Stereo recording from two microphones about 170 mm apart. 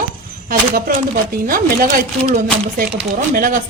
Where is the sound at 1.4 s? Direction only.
55° right (ahead or behind).